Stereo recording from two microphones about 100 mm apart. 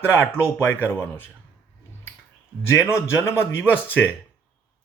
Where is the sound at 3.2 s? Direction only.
25° left (ahead or behind).